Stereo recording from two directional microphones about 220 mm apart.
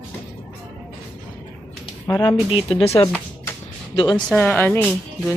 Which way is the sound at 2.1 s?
20° left (ahead or behind).